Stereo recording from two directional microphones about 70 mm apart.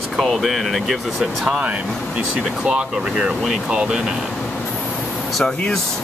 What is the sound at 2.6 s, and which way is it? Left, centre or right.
Speech, centre.